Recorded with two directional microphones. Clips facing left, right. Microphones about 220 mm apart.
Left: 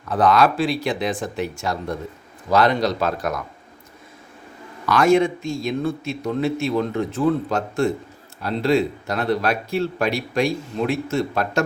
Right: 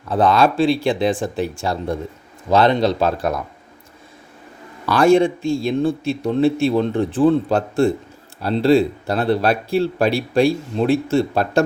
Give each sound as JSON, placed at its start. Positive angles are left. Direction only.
{"t": 0.1, "sound": "speech", "side_deg": -30}
{"t": 4.9, "sound": "speech", "side_deg": -30}